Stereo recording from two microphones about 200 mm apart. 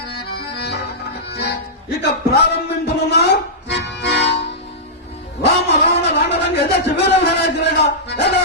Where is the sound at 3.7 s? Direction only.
60° left (ahead or behind).